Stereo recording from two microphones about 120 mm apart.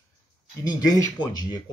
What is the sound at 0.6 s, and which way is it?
Speech, 30° left (ahead or behind).